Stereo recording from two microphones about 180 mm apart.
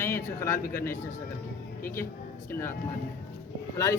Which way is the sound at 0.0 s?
15° left (ahead or behind).